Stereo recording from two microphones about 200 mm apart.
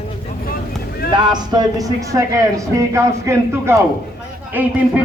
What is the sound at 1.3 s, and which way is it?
A man's voice, 20° right (ahead or behind).